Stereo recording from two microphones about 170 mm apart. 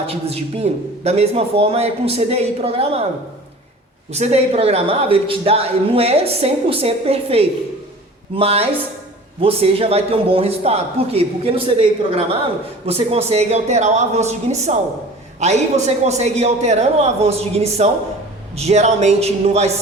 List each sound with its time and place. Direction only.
0.1 s speech: 35° right (ahead or behind)
4.1 s speech: 40° right (ahead or behind)